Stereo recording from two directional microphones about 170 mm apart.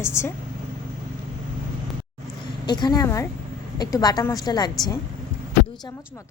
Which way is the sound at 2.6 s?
25° left (ahead or behind).